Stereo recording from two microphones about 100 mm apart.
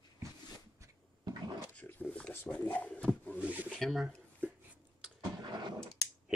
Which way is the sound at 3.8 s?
Centre (ahead or behind).